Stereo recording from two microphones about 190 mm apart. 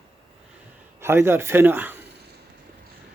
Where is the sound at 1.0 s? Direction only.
15° right (ahead or behind).